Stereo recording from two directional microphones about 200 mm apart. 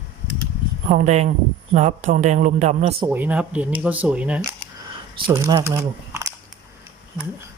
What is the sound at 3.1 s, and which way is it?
Speech, 10° right (ahead or behind).